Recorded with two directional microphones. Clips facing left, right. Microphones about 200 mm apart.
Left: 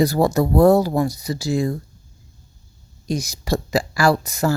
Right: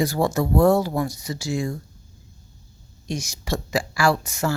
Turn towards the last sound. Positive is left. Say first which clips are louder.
# left 3 dB
turn(degrees=35)  # may be behind; listen again after turning